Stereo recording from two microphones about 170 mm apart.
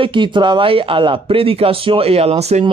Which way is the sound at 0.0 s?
30° right (ahead or behind).